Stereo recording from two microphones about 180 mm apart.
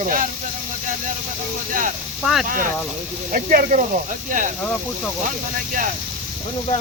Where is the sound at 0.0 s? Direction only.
50° right (ahead or behind).